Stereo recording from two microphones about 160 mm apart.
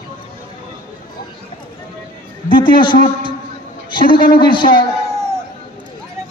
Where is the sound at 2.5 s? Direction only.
30° left (ahead or behind).